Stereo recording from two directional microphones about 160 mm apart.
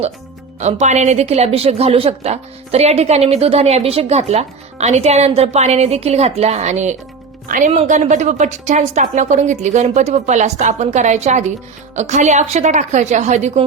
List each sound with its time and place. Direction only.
0.6 s a woman's voice: 45° right (ahead or behind)
7.4 s speech: 55° right (ahead or behind)
7.7 s a woman's voice: 45° right (ahead or behind)